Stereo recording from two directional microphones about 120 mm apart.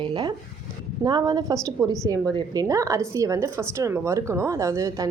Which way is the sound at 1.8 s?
5° left (ahead or behind).